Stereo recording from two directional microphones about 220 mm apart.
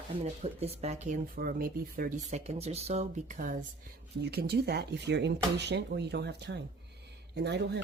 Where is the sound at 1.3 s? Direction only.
40° right (ahead or behind).